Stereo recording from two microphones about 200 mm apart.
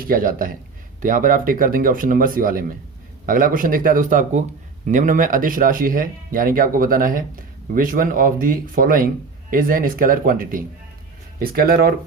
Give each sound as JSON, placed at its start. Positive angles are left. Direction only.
{"t": 0.0, "sound": "speech", "side_deg": -45}